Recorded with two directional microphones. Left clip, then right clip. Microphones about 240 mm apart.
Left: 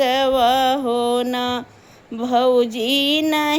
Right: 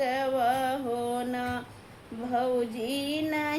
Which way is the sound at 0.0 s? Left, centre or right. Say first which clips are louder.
Left 10 dB; left.